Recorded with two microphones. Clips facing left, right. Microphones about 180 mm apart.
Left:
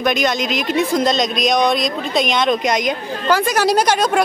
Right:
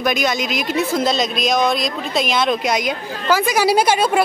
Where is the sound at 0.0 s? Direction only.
5° right (ahead or behind).